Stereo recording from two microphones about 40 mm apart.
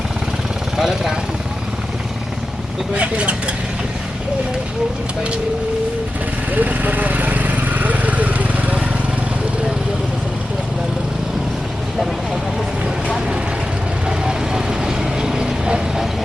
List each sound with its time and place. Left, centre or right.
0.8 s speech: centre
2.9 s speech: right
6.5 s vehicle: right
14.3 s vehicle: centre